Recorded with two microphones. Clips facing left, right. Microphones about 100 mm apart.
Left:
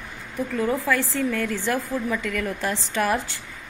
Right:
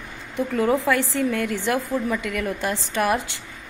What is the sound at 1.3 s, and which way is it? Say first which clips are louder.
A woman's voice: right 2 dB; 15° right (ahead or behind).